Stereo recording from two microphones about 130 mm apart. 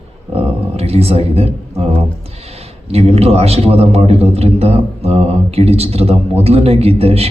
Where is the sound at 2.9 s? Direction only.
50° right (ahead or behind).